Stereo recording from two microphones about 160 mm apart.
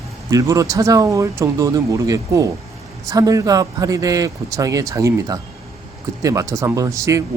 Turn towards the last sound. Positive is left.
turn(degrees=-20)  # may be behind; listen again after turning